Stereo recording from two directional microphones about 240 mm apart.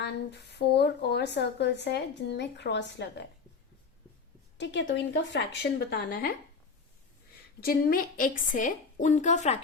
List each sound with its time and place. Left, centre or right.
0.0 s speech: left
4.5 s speech: left
7.6 s a woman's voice: left